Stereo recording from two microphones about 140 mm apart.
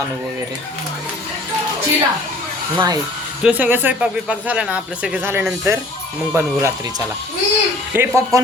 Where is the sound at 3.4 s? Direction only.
10° right (ahead or behind).